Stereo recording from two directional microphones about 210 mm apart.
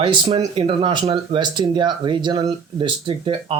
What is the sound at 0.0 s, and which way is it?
Speech, 25° right (ahead or behind).